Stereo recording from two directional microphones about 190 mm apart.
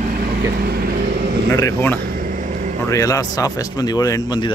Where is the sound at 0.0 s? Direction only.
50° right (ahead or behind).